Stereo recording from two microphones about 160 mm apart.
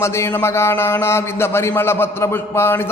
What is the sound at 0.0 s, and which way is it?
A man's voice, 15° left (ahead or behind).